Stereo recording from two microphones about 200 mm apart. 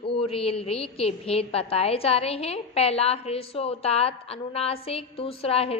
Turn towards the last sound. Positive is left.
turn(degrees=30)  # may be behind; listen again after turning